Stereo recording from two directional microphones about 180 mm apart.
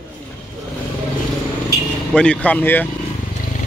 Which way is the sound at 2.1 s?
5° left (ahead or behind).